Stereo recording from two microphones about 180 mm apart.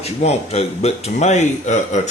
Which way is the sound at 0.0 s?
35° left (ahead or behind).